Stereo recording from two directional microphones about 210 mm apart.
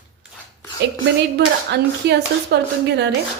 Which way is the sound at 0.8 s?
55° right (ahead or behind).